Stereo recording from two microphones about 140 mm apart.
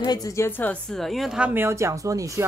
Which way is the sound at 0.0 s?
25° left (ahead or behind).